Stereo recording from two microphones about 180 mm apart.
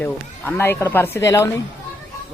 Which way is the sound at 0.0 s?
10° left (ahead or behind).